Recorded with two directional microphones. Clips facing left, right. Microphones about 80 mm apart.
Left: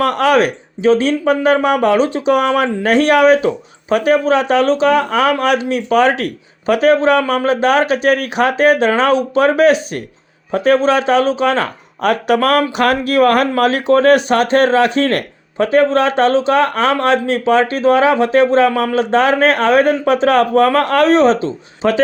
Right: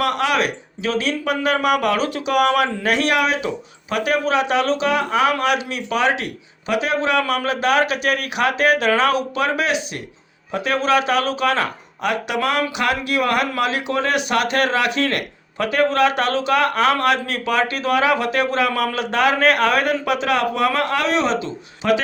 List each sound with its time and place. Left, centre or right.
0.0 s speech: left